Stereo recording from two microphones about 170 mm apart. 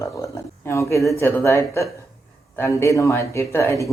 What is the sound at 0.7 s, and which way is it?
Speech, 15° left (ahead or behind).